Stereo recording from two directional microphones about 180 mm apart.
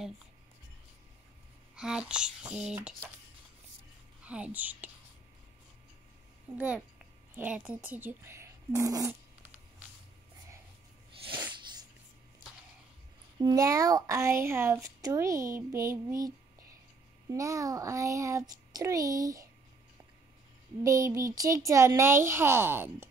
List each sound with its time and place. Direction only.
1.8 s speech: 5° right (ahead or behind)
4.2 s speech: 5° right (ahead or behind)
7.3 s speech: 5° right (ahead or behind)
13.4 s a child's voice: 20° right (ahead or behind)
20.8 s speech: 15° right (ahead or behind)